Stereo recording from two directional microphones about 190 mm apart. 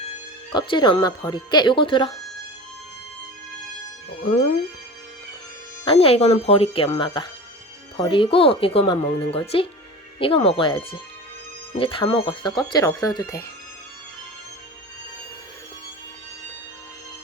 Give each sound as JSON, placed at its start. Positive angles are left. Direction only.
{"t": 0.5, "sound": "speech", "side_deg": 25}
{"t": 5.8, "sound": "speech", "side_deg": 30}